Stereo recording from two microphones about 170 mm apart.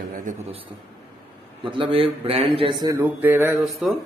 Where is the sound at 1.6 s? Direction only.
30° right (ahead or behind).